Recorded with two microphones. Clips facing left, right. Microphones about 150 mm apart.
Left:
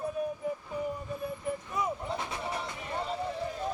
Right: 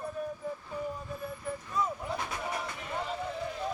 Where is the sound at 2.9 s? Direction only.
Centre (ahead or behind).